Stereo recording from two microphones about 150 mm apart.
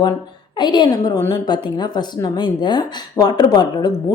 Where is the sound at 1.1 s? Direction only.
15° left (ahead or behind).